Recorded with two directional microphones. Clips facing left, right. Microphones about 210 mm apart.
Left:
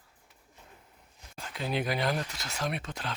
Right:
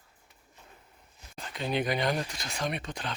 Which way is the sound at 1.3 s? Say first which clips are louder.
Right 2 dB; 5° left (ahead or behind).